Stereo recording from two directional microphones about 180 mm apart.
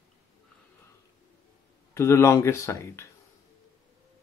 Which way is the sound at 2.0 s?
15° left (ahead or behind).